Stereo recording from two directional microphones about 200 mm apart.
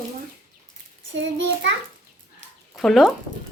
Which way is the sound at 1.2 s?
65° right (ahead or behind).